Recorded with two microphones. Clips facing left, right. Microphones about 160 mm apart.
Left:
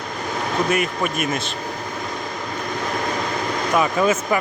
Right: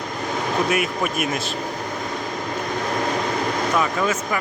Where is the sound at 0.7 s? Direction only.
Centre (ahead or behind).